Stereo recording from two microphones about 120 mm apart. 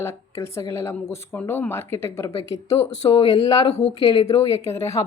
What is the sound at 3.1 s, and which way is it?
Speech, 40° left (ahead or behind).